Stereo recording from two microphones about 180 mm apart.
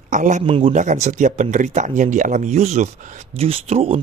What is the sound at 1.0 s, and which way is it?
Speech, 40° right (ahead or behind).